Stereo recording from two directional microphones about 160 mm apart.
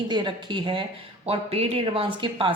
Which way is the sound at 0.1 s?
30° right (ahead or behind).